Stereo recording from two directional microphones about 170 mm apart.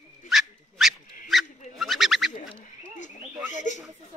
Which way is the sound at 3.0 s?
45° left (ahead or behind).